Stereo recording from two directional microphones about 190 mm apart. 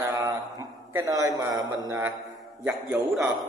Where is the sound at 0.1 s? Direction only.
15° right (ahead or behind).